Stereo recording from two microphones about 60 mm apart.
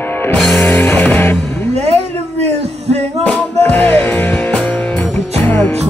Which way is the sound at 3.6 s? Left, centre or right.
Left.